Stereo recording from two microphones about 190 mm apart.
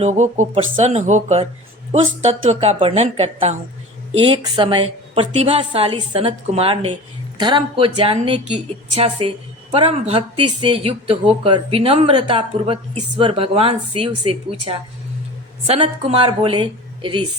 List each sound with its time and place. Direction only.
0.0 s a woman's voice: 35° right (ahead or behind)